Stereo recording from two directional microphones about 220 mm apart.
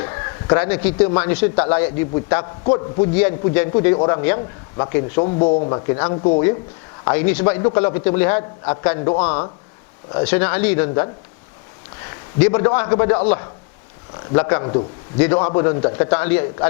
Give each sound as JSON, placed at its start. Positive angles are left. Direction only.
{"t": 0.0, "sound": "a man's voice", "side_deg": 20}
{"t": 2.4, "sound": "speech", "side_deg": 25}
{"t": 3.0, "sound": "a man's voice", "side_deg": 10}
{"t": 3.7, "sound": "a man's voice", "side_deg": 20}
{"t": 5.2, "sound": "speech", "side_deg": 30}
{"t": 7.0, "sound": "a man's voice", "side_deg": 10}
{"t": 10.2, "sound": "a man's voice", "side_deg": 10}
{"t": 12.1, "sound": "a man's voice", "side_deg": 10}
{"t": 15.2, "sound": "a man's voice", "side_deg": 10}